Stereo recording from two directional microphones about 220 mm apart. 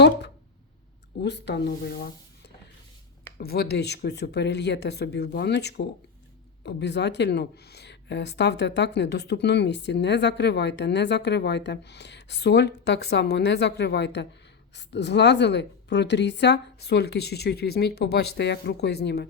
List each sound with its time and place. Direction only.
1.2 s speech: 50° left (ahead or behind)
3.3 s speech: 45° left (ahead or behind)